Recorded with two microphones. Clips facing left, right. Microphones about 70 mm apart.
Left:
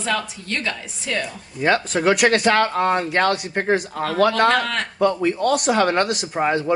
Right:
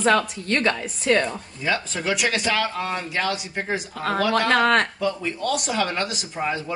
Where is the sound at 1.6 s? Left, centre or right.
Left.